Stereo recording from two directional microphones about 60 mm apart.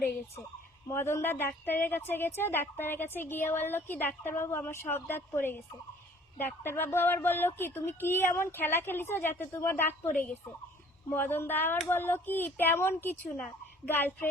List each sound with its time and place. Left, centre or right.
0.9 s speech: left
9.7 s speech: left